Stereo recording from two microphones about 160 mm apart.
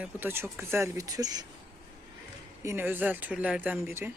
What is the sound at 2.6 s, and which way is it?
Speech, 15° right (ahead or behind).